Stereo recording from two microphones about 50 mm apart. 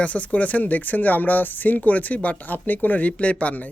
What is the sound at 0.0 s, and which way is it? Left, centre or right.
Speech, left.